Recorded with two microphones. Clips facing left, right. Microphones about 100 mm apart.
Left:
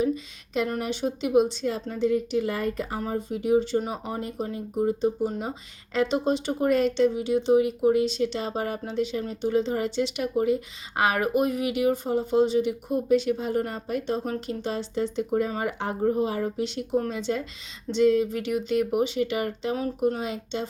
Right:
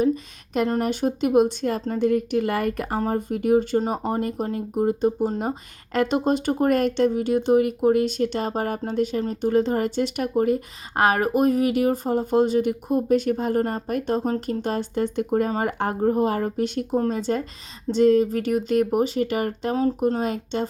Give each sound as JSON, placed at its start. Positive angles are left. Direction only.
{"t": 0.8, "sound": "speech", "side_deg": -50}